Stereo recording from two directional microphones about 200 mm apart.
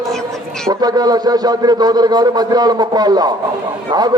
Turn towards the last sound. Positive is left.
turn(degrees=-20)  # may be behind; listen again after turning